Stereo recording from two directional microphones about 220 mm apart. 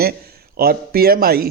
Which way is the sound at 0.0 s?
45° right (ahead or behind).